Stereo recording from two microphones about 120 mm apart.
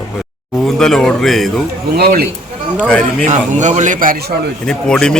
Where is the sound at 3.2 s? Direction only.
85° right.